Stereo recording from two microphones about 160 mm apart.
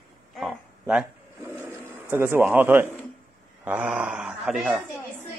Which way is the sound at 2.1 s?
15° right (ahead or behind).